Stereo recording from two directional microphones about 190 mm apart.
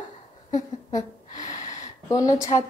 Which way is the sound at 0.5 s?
40° left (ahead or behind).